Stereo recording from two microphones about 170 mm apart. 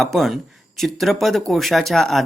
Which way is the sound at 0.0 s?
Centre (ahead or behind).